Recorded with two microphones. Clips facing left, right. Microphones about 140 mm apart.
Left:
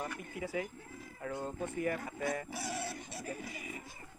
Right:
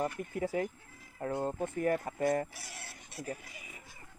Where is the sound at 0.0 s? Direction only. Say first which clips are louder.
Right 6 dB; 45° right (ahead or behind).